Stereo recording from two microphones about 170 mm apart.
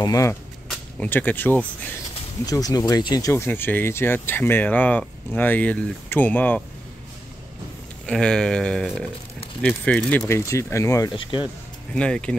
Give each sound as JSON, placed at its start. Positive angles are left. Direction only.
{"t": 0.0, "sound": "speech", "side_deg": 20}
{"t": 0.7, "sound": "speech", "side_deg": 10}
{"t": 2.4, "sound": "speech", "side_deg": 20}
{"t": 8.1, "sound": "speech", "side_deg": 5}
{"t": 11.9, "sound": "speech", "side_deg": 5}